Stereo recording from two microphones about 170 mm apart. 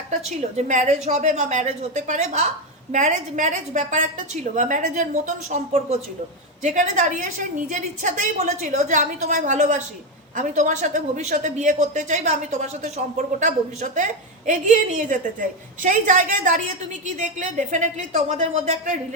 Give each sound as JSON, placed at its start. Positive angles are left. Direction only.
{"t": 0.1, "sound": "speech", "side_deg": -40}